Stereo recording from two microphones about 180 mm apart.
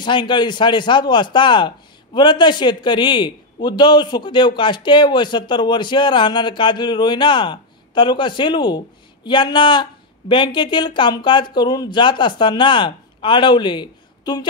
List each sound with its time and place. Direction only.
0.0 s a man's voice: 25° left (ahead or behind)